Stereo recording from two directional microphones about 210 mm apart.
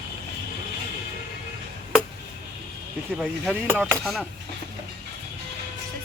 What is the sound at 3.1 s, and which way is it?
Speech, 5° right (ahead or behind).